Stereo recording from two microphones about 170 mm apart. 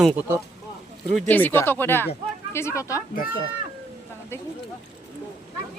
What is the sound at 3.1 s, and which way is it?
Speech, 55° left (ahead or behind).